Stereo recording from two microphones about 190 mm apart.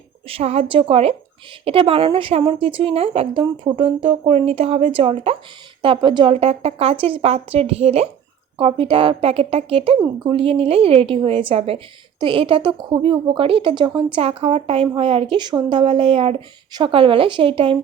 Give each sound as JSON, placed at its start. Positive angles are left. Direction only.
{"t": 0.3, "sound": "a woman's voice", "side_deg": -30}